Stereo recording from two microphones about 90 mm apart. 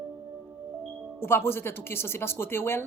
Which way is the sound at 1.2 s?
25° left (ahead or behind).